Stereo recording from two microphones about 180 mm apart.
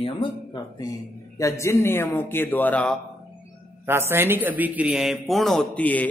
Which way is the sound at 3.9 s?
15° right (ahead or behind).